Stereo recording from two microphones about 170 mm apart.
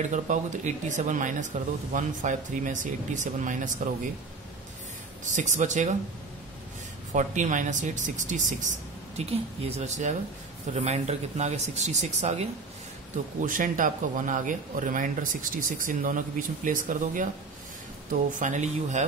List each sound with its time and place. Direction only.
0.1 s speech: 45° right (ahead or behind)
5.2 s speech: 45° right (ahead or behind)
7.1 s speech: 45° right (ahead or behind)
13.4 s speech: 50° right (ahead or behind)
18.3 s speech: 45° right (ahead or behind)